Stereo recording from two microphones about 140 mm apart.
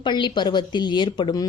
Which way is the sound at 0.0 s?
35° left (ahead or behind).